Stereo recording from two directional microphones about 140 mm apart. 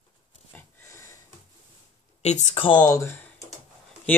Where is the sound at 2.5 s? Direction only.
40° left (ahead or behind).